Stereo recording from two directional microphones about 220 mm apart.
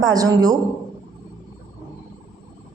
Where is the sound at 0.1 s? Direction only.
15° right (ahead or behind).